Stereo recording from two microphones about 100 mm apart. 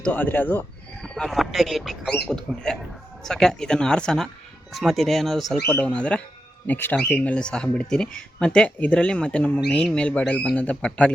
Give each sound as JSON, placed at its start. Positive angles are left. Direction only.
{"t": 0.0, "sound": "speech", "side_deg": 15}
{"t": 1.0, "sound": "speech", "side_deg": 5}
{"t": 5.6, "sound": "speech", "side_deg": 15}
{"t": 6.7, "sound": "speech", "side_deg": 20}